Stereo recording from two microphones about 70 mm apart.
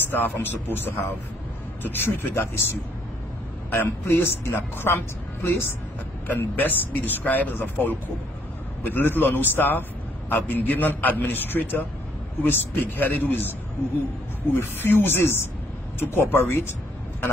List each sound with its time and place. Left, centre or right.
0.2 s a woman's voice: left
3.7 s a woman's voice: left